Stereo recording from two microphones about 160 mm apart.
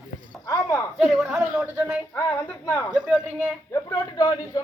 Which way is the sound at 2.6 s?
15° left (ahead or behind).